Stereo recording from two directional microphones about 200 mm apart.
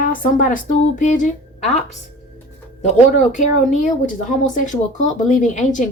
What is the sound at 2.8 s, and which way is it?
Speech, 35° left (ahead or behind).